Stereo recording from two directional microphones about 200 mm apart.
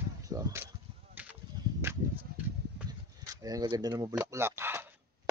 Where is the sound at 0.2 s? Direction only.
15° right (ahead or behind).